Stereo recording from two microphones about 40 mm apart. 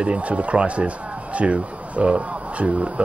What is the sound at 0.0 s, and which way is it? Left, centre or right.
Speech, right.